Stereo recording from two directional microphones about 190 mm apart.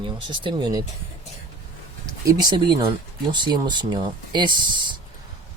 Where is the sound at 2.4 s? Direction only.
25° right (ahead or behind).